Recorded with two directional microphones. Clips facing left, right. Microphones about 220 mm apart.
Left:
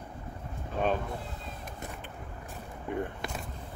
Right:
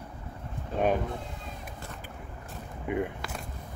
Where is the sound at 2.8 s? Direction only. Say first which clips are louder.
Right 3 dB; 10° right (ahead or behind).